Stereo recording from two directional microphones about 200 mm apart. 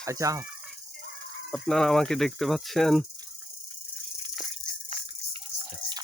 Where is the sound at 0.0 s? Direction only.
15° right (ahead or behind).